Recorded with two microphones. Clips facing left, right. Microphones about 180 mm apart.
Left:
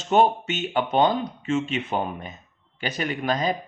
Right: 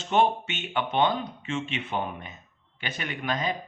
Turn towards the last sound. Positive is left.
turn(degrees=40)  # may be behind; listen again after turning